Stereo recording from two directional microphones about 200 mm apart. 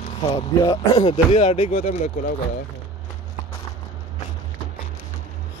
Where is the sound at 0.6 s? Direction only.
20° left (ahead or behind).